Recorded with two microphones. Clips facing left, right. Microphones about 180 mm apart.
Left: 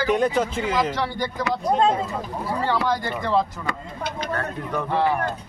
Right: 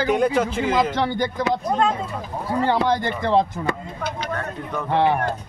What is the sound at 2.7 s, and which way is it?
Speech, 20° right (ahead or behind).